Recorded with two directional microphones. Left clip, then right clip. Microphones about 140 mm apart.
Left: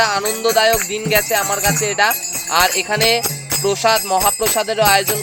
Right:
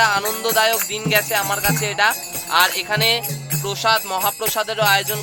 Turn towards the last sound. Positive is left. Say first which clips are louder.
# left 3 dB
turn(degrees=40)  # may be behind; listen again after turning